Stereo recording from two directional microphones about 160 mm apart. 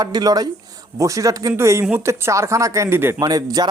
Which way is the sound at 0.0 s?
25° right (ahead or behind).